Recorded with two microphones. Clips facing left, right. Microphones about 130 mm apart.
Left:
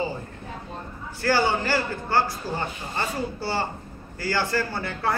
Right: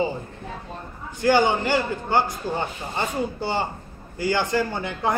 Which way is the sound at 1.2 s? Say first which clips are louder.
Right 4 dB; 20° right (ahead or behind).